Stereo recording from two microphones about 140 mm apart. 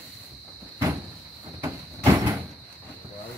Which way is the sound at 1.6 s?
20° right (ahead or behind).